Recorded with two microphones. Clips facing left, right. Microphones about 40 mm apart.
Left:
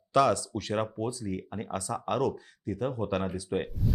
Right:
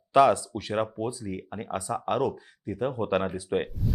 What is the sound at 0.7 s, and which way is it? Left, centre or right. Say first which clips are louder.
Speech: right 2 dB; centre.